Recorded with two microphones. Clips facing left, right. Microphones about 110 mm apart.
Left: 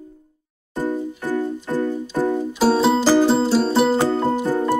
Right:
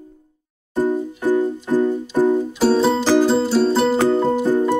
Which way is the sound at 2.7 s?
5° left (ahead or behind).